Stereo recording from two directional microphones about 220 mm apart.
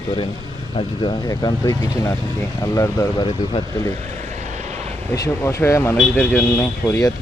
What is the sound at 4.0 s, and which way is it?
Vehicle, 30° right (ahead or behind).